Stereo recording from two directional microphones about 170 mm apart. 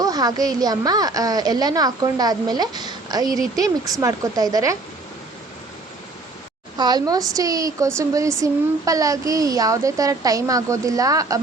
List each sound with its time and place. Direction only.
0.0 s a woman's voice: 20° right (ahead or behind)
6.7 s a woman's voice: 25° right (ahead or behind)